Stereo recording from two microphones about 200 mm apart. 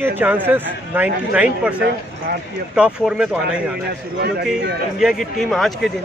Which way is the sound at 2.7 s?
5° right (ahead or behind).